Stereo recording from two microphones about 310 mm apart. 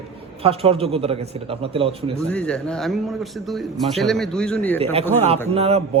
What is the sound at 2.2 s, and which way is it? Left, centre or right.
Speech, centre.